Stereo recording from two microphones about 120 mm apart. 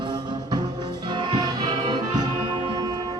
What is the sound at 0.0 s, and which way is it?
Music, 35° right (ahead or behind).